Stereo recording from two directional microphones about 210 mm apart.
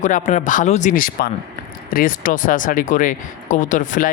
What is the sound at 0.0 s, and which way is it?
Speech, 35° left (ahead or behind).